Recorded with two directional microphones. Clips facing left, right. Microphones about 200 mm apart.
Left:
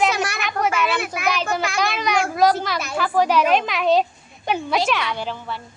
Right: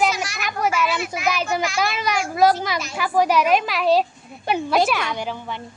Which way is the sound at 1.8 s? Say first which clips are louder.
Left 2 dB; 5° right (ahead or behind).